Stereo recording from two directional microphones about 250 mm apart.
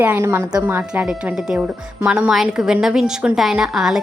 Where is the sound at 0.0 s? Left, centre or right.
Centre.